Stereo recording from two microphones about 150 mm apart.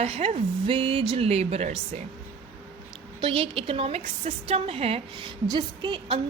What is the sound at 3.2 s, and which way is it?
A woman's voice, 40° right (ahead or behind).